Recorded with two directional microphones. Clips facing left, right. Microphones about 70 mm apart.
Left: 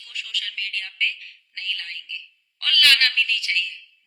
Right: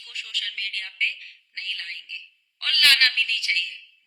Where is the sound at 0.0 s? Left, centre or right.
Right.